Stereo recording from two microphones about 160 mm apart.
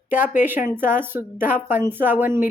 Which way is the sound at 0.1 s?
55° left (ahead or behind).